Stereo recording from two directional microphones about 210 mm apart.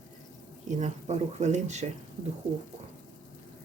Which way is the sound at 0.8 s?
35° right (ahead or behind).